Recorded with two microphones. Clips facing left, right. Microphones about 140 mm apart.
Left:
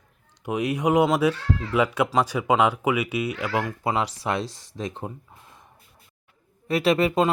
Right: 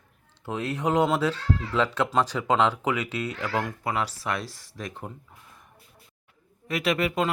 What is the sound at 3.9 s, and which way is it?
Speech, 25° left (ahead or behind).